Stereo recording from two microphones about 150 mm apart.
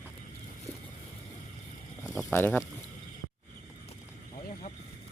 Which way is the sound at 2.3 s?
15° left (ahead or behind).